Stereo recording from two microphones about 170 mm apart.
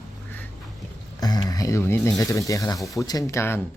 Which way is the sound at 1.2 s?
20° left (ahead or behind).